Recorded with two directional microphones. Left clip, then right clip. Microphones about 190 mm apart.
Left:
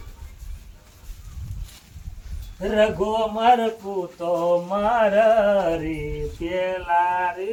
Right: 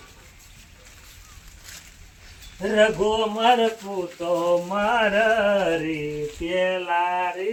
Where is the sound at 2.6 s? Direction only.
10° right (ahead or behind).